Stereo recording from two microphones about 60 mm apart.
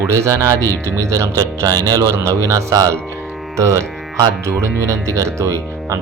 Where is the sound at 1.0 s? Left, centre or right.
Right.